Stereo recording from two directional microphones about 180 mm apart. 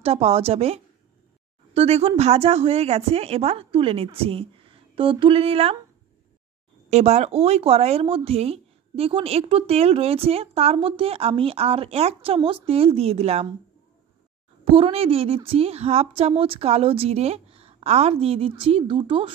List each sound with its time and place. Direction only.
0.0 s speech: 35° right (ahead or behind)
6.9 s speech: 40° right (ahead or behind)
14.6 s speech: 30° right (ahead or behind)